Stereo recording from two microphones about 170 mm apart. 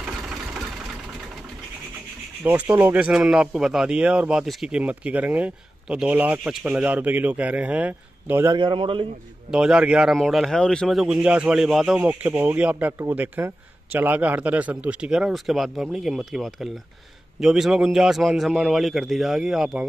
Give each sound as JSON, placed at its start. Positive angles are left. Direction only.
{"t": 2.4, "sound": "speech", "side_deg": -10}
{"t": 8.5, "sound": "speech", "side_deg": -30}
{"t": 9.5, "sound": "speech", "side_deg": -5}